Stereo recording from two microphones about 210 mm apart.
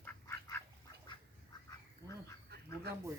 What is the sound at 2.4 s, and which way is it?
Bird, 50° right (ahead or behind).